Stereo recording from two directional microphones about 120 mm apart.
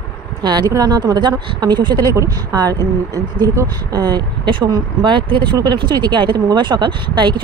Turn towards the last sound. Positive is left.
turn(degrees=-40)  # may be behind; listen again after turning